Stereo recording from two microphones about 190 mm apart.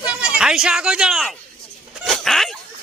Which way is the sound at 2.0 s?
Centre (ahead or behind).